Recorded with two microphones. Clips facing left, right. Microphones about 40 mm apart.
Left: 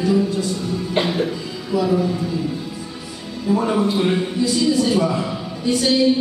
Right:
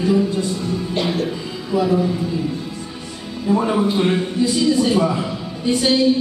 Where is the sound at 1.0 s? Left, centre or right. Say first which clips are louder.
Left 2 dB; left.